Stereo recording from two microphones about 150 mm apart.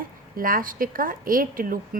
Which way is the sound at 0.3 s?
70° right (ahead or behind).